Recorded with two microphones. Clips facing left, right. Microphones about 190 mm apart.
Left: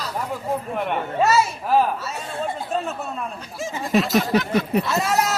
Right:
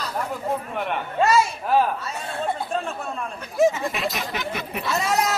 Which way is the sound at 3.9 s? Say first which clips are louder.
Left 9 dB; 40° left (ahead or behind).